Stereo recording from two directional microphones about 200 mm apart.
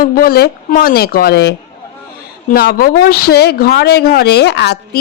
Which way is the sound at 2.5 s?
50° left (ahead or behind).